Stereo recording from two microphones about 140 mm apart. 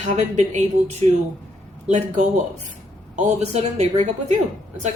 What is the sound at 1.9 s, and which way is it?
A woman's voice, 55° right (ahead or behind).